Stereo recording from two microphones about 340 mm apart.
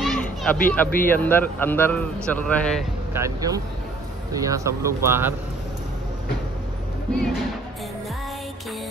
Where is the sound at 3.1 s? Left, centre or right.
Centre.